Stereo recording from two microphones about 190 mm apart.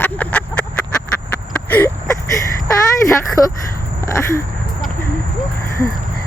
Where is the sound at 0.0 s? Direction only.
10° left (ahead or behind).